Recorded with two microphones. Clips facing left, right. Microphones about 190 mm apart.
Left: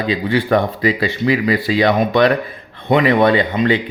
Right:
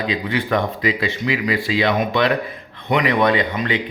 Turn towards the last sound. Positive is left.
turn(degrees=30)  # may be behind; listen again after turning